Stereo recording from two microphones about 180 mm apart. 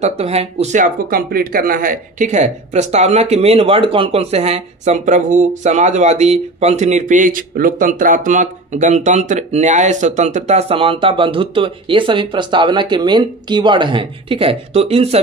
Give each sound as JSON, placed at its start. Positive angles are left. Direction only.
{"t": 0.0, "sound": "speech", "side_deg": -35}